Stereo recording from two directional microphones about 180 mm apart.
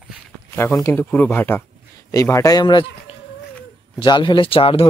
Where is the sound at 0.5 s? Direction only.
15° left (ahead or behind).